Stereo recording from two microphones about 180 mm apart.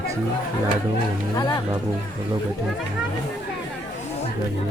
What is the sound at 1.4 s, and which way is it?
Speech, 25° left (ahead or behind).